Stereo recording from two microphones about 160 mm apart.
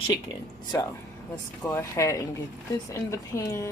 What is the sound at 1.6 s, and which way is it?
A woman's voice, 15° left (ahead or behind).